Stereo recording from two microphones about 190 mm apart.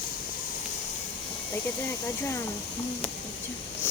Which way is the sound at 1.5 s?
10° left (ahead or behind).